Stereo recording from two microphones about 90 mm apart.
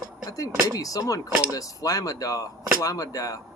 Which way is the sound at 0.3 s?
40° left (ahead or behind).